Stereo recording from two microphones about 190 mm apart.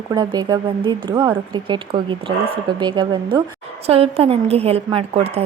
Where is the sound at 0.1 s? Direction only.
20° right (ahead or behind).